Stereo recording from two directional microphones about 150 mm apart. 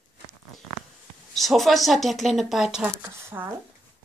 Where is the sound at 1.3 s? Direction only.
Centre (ahead or behind).